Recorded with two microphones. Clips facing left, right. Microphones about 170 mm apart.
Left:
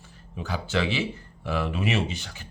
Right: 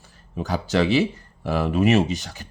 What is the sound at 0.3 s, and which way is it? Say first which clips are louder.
Speech: right 6 dB; 40° right (ahead or behind).